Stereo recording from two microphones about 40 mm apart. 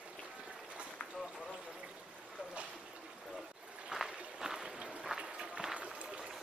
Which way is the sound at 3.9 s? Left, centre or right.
Centre.